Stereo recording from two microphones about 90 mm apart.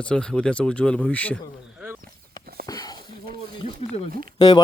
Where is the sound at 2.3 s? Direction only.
45° left (ahead or behind).